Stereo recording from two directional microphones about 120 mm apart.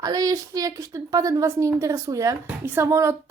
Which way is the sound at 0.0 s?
30° right (ahead or behind).